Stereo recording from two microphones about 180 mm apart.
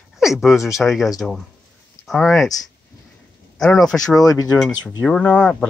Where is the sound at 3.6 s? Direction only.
Centre (ahead or behind).